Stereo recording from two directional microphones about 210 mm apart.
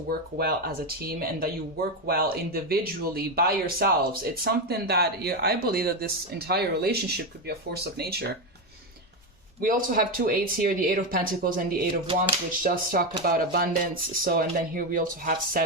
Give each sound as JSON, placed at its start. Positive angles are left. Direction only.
{"t": 0.1, "sound": "speech", "side_deg": -45}
{"t": 9.6, "sound": "speech", "side_deg": -40}